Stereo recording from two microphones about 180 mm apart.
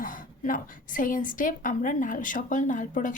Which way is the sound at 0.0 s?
50° left (ahead or behind).